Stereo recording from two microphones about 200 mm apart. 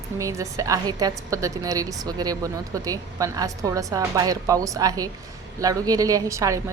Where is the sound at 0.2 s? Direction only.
15° right (ahead or behind).